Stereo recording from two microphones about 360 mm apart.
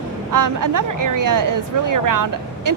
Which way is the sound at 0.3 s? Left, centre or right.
Right.